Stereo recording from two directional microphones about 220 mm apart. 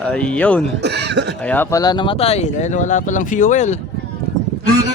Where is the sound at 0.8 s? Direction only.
50° right (ahead or behind).